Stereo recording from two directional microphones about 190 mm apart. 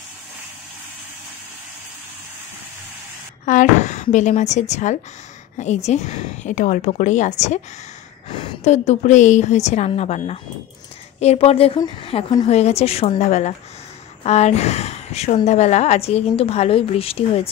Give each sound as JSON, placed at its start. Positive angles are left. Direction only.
{"t": 3.4, "sound": "a woman's voice", "side_deg": 40}